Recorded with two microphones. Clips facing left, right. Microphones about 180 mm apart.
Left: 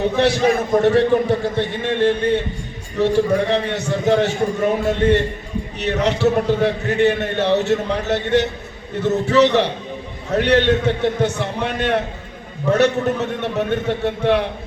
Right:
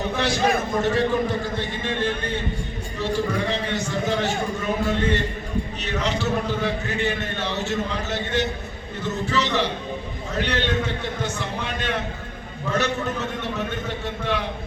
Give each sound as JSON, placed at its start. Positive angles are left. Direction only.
{"t": 0.8, "sound": "a man's voice", "side_deg": 65}